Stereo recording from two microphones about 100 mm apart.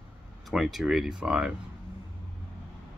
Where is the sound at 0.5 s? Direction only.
5° right (ahead or behind).